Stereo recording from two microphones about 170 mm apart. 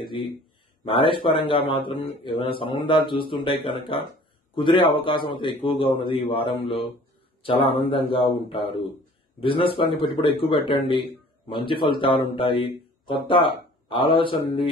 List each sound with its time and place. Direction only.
0.0 s a man's voice: 30° left (ahead or behind)